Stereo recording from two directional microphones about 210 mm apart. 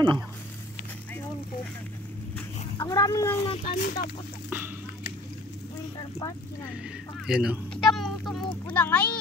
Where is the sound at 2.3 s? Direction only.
15° left (ahead or behind).